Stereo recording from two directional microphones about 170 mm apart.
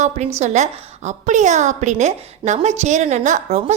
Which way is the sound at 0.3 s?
45° right (ahead or behind).